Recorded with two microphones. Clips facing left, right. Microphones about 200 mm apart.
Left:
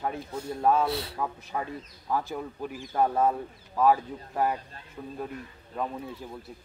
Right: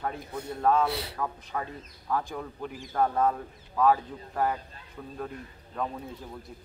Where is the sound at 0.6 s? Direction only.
10° left (ahead or behind).